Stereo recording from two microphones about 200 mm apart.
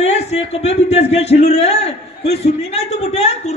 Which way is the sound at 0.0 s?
35° left (ahead or behind).